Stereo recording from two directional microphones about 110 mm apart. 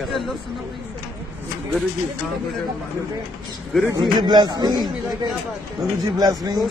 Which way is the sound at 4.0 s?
40° right (ahead or behind).